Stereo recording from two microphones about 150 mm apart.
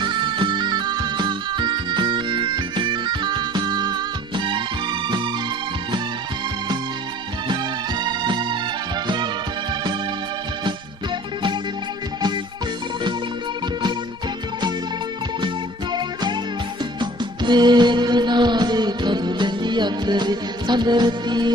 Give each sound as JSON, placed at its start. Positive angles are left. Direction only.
{"t": 0.0, "sound": "music", "side_deg": -30}
{"t": 7.4, "sound": "music", "side_deg": -30}
{"t": 15.4, "sound": "music", "side_deg": -30}